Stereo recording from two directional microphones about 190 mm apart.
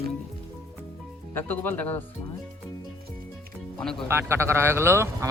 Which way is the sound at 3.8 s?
5° left (ahead or behind).